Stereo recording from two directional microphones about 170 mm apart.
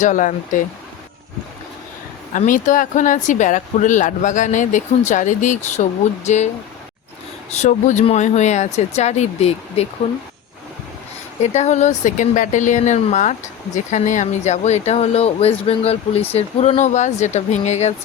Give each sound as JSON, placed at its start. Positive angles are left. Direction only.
{"t": 0.0, "sound": "speech", "side_deg": 50}
{"t": 2.3, "sound": "speech", "side_deg": 50}
{"t": 7.5, "sound": "speech", "side_deg": 45}
{"t": 11.4, "sound": "speech", "side_deg": 45}